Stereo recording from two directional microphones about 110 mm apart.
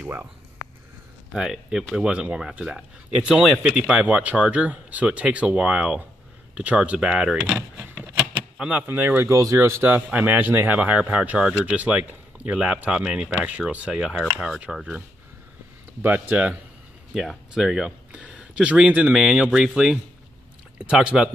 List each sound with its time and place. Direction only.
0.0 s speech: 15° right (ahead or behind)
1.3 s speech: 5° right (ahead or behind)
17.1 s speech: centre (ahead or behind)